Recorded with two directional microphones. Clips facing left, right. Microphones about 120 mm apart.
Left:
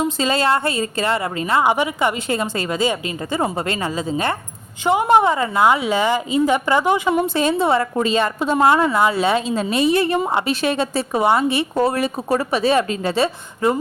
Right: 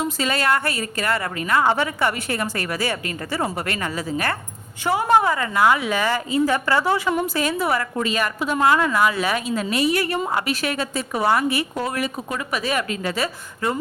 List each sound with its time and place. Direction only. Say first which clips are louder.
0.0 s a woman's voice: left 4 dB; 25° left (ahead or behind)